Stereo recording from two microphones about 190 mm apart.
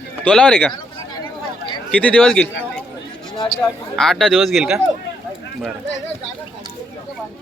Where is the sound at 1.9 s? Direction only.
5° left (ahead or behind).